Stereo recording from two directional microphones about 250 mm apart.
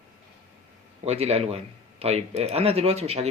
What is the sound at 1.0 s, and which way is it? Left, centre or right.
A man's voice, right.